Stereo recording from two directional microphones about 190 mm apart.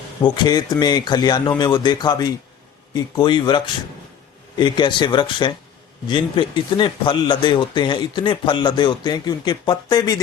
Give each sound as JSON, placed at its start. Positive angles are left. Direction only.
{"t": 0.2, "sound": "speech", "side_deg": 20}